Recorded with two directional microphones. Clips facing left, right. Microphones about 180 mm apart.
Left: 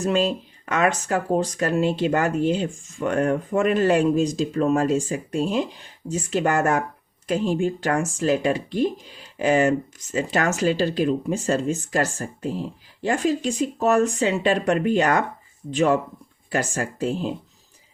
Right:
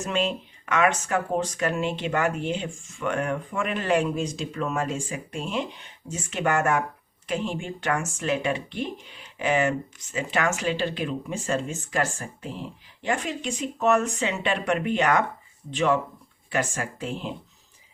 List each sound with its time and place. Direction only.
0.0 s speech: 35° left (ahead or behind)